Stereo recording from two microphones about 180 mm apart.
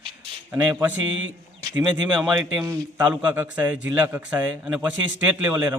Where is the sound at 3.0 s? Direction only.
10° right (ahead or behind).